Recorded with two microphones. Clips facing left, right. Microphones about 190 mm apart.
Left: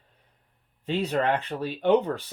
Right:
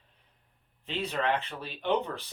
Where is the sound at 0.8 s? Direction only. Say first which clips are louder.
Left 7 dB; 45° left (ahead or behind).